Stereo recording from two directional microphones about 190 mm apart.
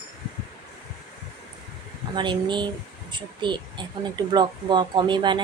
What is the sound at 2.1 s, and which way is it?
Speech, 25° right (ahead or behind).